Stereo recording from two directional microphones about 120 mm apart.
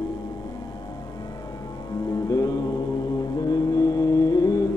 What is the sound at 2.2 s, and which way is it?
Mantra, 30° left (ahead or behind).